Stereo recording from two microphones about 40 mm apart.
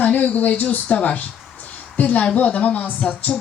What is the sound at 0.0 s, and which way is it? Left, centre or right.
Speech, left.